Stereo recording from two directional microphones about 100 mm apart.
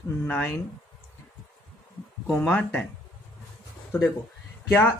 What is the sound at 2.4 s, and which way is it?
Speech, 15° left (ahead or behind).